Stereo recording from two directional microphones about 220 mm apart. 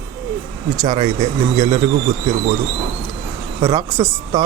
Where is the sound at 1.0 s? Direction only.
30° right (ahead or behind).